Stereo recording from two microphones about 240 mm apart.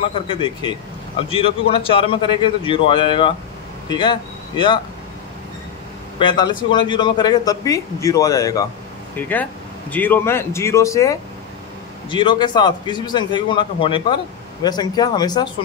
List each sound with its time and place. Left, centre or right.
0.0 s a man's voice: left
6.1 s a man's voice: centre